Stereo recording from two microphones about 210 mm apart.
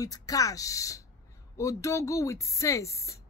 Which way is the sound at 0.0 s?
15° left (ahead or behind).